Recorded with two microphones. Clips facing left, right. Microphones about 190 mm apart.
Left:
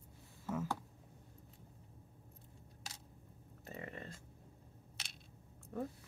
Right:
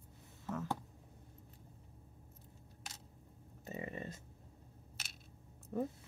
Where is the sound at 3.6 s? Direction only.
20° right (ahead or behind).